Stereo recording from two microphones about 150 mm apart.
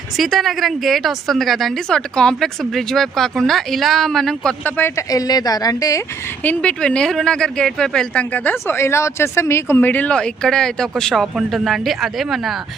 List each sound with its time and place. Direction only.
0.2 s speech: centre (ahead or behind)
4.8 s a woman's voice: 20° left (ahead or behind)
6.4 s speech: 10° left (ahead or behind)